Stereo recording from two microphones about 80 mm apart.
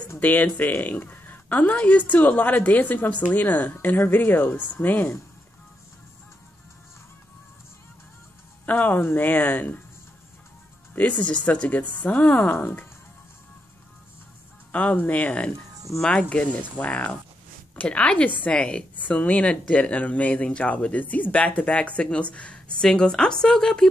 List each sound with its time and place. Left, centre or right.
0.2 s a woman's voice: left
8.6 s a woman's voice: left
11.0 s a woman's voice: centre
14.7 s a woman's voice: centre